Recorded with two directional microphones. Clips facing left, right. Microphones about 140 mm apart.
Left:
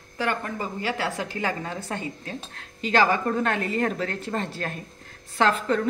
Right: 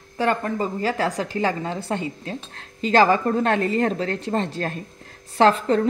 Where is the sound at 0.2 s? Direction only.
35° right (ahead or behind).